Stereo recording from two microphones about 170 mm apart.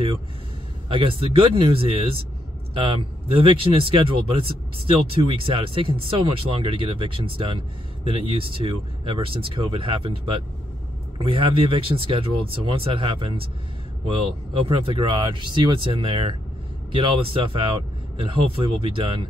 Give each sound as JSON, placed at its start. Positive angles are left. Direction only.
{"t": 0.8, "sound": "speech", "side_deg": -30}
{"t": 14.6, "sound": "speech", "side_deg": -30}